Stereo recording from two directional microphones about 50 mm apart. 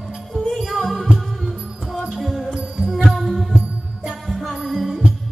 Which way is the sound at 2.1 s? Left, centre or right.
Centre.